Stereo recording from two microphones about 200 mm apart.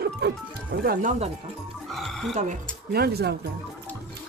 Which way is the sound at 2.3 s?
35° right (ahead or behind).